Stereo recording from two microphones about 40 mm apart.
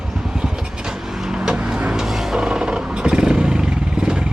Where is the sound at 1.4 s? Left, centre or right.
Right.